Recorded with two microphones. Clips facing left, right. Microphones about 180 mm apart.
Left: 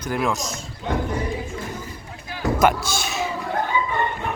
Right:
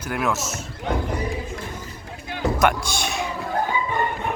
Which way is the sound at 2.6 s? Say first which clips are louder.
Left 3 dB; 5° left (ahead or behind).